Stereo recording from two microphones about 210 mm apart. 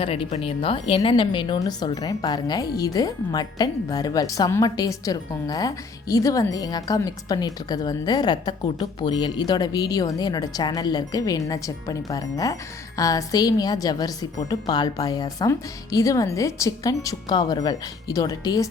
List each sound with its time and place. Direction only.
0.0 s a woman's voice: 25° left (ahead or behind)